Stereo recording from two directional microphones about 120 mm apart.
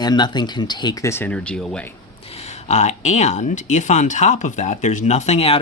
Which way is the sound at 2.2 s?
60° left (ahead or behind).